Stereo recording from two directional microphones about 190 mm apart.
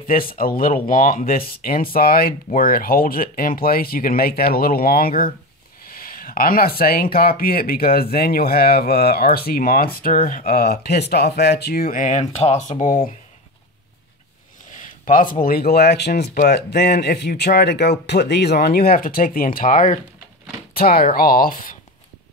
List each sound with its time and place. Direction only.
0.3 s speech: 50° left (ahead or behind)
14.7 s a sound: 45° left (ahead or behind)
15.4 s a man's voice: 50° left (ahead or behind)